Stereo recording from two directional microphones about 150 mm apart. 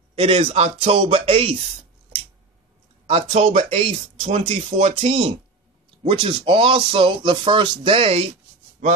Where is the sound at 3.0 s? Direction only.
45° right (ahead or behind).